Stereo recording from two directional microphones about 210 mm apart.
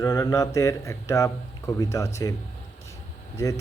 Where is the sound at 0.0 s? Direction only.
15° left (ahead or behind).